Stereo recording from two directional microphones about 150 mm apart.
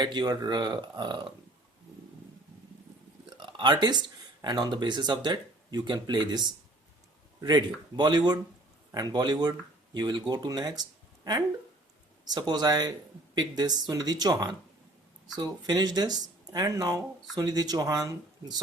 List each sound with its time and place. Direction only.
0.0 s speech: 30° right (ahead or behind)
3.2 s a sound: 30° right (ahead or behind)
4.4 s speech: 30° right (ahead or behind)
7.4 s speech: 30° right (ahead or behind)